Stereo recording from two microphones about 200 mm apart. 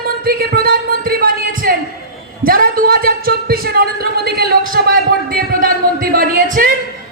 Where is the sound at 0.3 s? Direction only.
50° right (ahead or behind).